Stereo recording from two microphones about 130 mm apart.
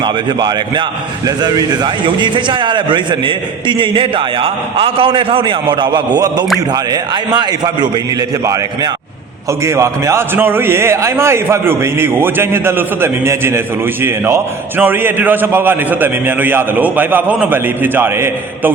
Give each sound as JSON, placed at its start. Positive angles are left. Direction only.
{"t": 0.0, "sound": "a man's voice", "side_deg": -35}
{"t": 9.5, "sound": "a man's voice", "side_deg": -20}